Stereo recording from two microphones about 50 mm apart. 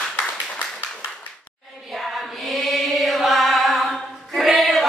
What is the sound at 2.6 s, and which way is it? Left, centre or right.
Chant, centre.